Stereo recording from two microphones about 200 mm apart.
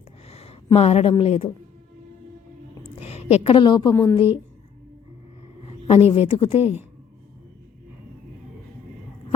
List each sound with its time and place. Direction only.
0.3 s a sound: 30° left (ahead or behind)
1.2 s speech: 30° left (ahead or behind)
3.0 s a woman's voice: 30° left (ahead or behind)
3.9 s speech: 10° left (ahead or behind)
5.9 s a woman's voice: 30° left (ahead or behind)